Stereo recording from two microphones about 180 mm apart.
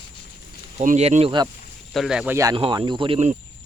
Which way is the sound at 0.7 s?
40° right (ahead or behind).